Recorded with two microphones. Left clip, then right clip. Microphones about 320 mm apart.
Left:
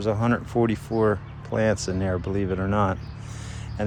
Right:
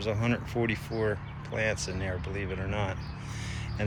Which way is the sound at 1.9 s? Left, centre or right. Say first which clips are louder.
Left 8 dB; left.